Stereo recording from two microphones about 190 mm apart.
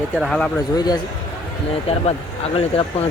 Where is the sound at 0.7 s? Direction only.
20° left (ahead or behind).